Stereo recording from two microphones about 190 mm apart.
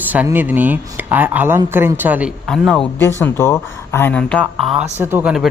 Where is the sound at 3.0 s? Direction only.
15° left (ahead or behind).